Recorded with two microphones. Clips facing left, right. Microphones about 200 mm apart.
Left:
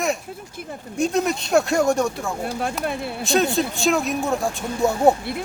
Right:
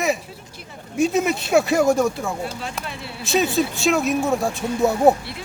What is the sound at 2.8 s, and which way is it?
Speech, 50° left (ahead or behind).